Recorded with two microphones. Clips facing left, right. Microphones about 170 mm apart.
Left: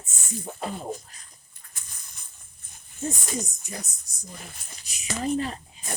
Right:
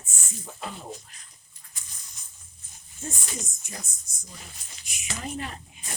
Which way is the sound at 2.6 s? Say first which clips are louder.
Left 1 dB; 60° left (ahead or behind).